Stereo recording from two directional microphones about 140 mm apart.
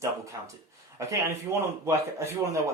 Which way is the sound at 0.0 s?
20° right (ahead or behind).